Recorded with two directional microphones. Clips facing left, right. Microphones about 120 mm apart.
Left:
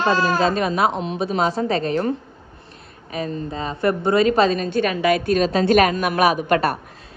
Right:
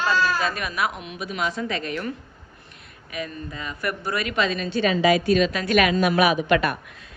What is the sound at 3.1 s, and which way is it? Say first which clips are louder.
A woman's voice: left 6 dB; 30° left (ahead or behind).